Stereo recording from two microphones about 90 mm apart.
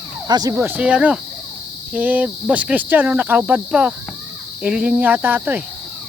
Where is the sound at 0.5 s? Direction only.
20° right (ahead or behind).